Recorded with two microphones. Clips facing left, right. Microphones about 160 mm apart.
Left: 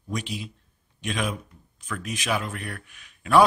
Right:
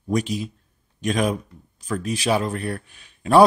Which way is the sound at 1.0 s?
40° right (ahead or behind).